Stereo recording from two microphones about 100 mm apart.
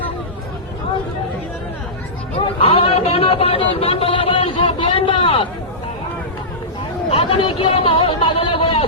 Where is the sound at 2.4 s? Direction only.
65° left (ahead or behind).